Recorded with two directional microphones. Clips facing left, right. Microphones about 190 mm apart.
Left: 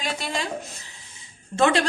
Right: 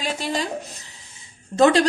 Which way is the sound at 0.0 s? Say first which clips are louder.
Right 3 dB; 35° right (ahead or behind).